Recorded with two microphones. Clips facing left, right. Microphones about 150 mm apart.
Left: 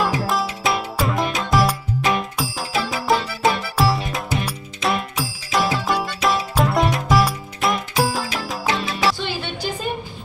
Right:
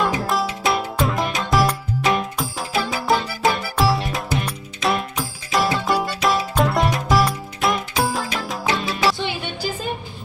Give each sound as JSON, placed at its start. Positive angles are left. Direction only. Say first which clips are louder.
{"t": 0.0, "sound": "music", "louder": "even", "side_deg": 0}